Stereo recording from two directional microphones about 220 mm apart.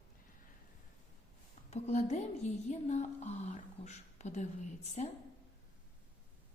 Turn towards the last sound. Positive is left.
turn(degrees=35)  # may be behind; listen again after turning